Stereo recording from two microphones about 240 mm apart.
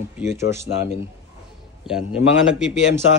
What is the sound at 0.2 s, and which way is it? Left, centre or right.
Speech, centre.